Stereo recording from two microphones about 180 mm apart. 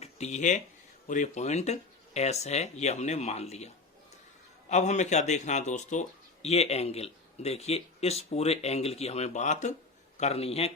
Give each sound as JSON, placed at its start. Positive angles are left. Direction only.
{"t": 0.0, "sound": "speech", "side_deg": 40}
{"t": 4.7, "sound": "speech", "side_deg": 40}